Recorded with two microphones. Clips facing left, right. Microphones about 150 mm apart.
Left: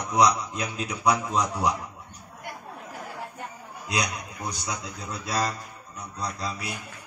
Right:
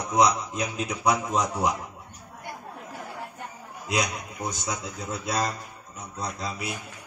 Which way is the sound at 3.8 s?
25° right (ahead or behind).